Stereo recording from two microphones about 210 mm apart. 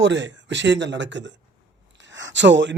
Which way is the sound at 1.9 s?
60° right (ahead or behind).